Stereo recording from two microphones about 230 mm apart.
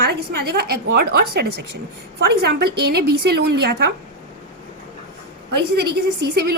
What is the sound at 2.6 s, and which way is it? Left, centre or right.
A woman's voice, right.